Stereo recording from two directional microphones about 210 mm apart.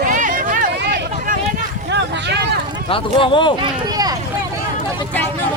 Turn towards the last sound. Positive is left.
turn(degrees=-20)  # may be behind; listen again after turning